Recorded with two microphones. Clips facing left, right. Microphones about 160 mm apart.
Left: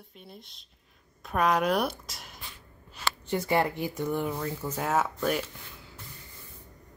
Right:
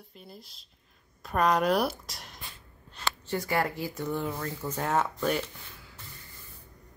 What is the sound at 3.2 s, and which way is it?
Speech, 20° left (ahead or behind).